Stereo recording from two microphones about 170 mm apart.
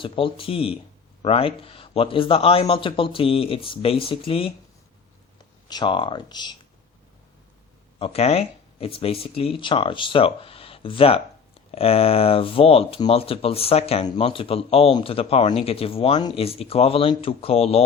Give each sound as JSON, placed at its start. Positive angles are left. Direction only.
{"t": 0.0, "sound": "speech", "side_deg": 30}
{"t": 5.6, "sound": "speech", "side_deg": 25}
{"t": 7.9, "sound": "speech", "side_deg": 35}